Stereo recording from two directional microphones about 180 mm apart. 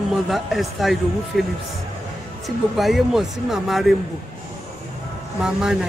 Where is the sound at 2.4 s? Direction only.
Centre (ahead or behind).